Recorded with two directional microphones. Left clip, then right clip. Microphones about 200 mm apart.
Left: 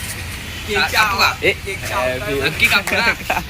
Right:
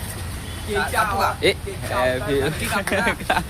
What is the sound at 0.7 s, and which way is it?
Speech, 10° right (ahead or behind).